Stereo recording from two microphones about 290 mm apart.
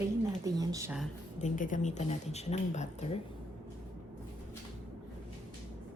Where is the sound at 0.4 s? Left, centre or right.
Centre.